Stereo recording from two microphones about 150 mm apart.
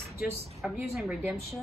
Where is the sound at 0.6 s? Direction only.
Centre (ahead or behind).